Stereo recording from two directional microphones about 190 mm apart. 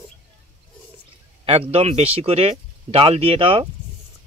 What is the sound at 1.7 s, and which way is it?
Speech, 30° right (ahead or behind).